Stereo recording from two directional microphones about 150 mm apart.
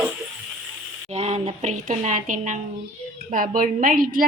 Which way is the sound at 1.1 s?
45° right (ahead or behind).